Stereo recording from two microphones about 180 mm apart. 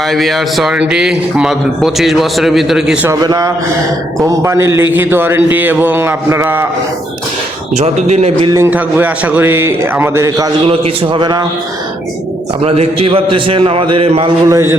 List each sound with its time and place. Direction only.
0.0 s a man's voice: centre (ahead or behind)
3.1 s a man's voice: 20° right (ahead or behind)
7.7 s a man's voice: 35° right (ahead or behind)
8.4 s a man's voice: 15° right (ahead or behind)
12.6 s a man's voice: 35° right (ahead or behind); by 14.8 s 15° right (ahead or behind)